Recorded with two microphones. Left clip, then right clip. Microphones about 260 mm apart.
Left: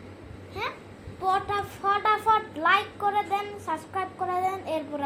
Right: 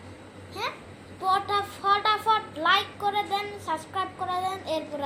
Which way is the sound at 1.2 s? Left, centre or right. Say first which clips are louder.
Right 1 dB; left.